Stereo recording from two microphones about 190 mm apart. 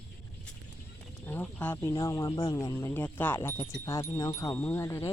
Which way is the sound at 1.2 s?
10° left (ahead or behind).